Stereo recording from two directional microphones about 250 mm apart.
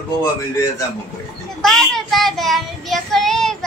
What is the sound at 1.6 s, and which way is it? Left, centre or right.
Child singing, centre.